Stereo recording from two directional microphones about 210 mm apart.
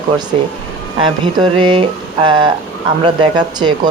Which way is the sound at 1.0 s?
25° right (ahead or behind).